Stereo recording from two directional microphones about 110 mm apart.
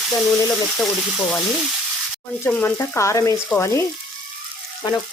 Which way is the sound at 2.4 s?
20° left (ahead or behind).